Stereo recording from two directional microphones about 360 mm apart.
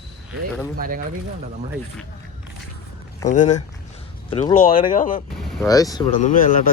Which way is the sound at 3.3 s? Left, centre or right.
Centre.